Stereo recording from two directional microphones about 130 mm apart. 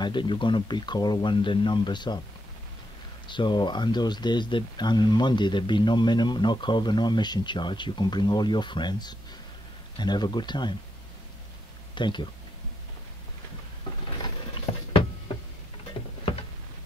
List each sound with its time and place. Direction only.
0.0 s speech: 40° left (ahead or behind)
3.3 s speech: 35° left (ahead or behind)
11.9 s speech: 35° left (ahead or behind)